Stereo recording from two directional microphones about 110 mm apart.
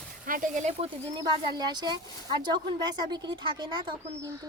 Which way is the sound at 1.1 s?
40° right (ahead or behind).